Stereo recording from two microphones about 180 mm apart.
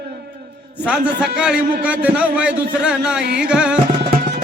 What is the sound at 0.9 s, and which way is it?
Speech, 5° right (ahead or behind).